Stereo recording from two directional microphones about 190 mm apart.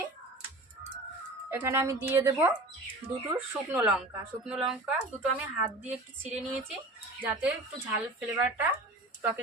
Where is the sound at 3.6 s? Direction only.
5° right (ahead or behind).